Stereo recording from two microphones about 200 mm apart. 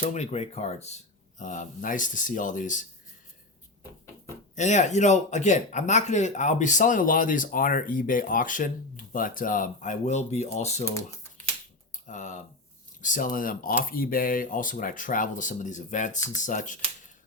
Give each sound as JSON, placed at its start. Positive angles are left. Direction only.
{"t": 0.0, "sound": "speech", "side_deg": 35}
{"t": 4.5, "sound": "speech", "side_deg": 35}
{"t": 10.8, "sound": "typing", "side_deg": 15}
{"t": 11.9, "sound": "a sound", "side_deg": 40}
{"t": 13.0, "sound": "speech", "side_deg": 40}